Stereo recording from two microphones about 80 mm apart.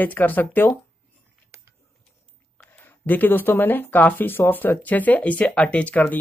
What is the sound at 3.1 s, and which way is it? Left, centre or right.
Speech, left.